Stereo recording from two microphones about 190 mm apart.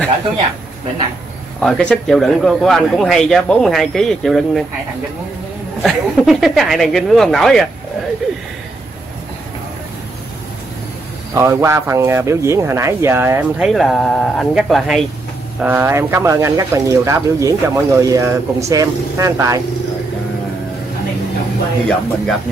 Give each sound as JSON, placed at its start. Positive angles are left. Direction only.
{"t": 1.6, "sound": "a man's voice", "side_deg": 5}
{"t": 5.8, "sound": "a man's voice", "side_deg": 0}
{"t": 11.3, "sound": "speech", "side_deg": -15}
{"t": 21.8, "sound": "a man's voice", "side_deg": 0}